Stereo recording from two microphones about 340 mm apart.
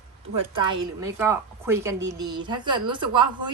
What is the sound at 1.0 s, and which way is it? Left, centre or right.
A woman's voice, centre.